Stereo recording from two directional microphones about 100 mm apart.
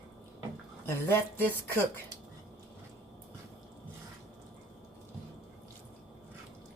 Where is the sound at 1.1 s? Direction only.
20° left (ahead or behind).